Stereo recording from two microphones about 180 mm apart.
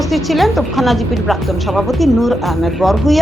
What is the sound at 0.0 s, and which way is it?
A woman's voice, centre (ahead or behind).